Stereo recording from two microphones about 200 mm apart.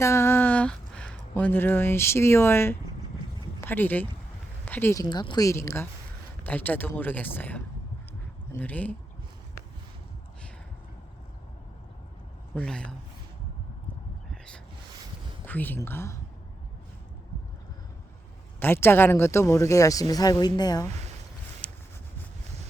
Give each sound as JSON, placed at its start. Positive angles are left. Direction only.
{"t": 0.0, "sound": "speech", "side_deg": 15}
{"t": 12.5, "sound": "speech", "side_deg": 5}
{"t": 15.4, "sound": "speech", "side_deg": 10}
{"t": 18.6, "sound": "speech", "side_deg": 10}
{"t": 21.6, "sound": "a sound", "side_deg": 5}